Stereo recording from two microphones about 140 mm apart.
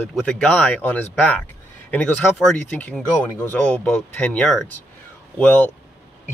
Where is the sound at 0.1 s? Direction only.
5° left (ahead or behind).